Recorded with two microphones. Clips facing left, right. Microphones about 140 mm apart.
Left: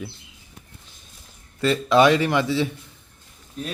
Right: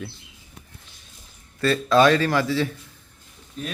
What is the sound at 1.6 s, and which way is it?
Speech, 20° left (ahead or behind).